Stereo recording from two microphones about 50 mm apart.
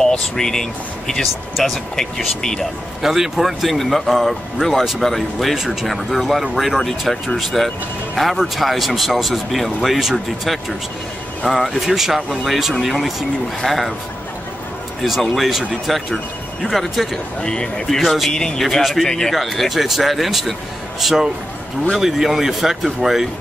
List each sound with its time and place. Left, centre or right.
0.0 s speech: centre
3.0 s speech: centre
15.0 s speech: centre
17.4 s speech: centre
17.8 s speech: centre
18.3 s speech: centre
18.8 s speech: centre
19.0 s speech: centre
19.3 s speech: centre